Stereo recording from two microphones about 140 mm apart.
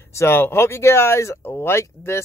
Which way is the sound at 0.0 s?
20° left (ahead or behind).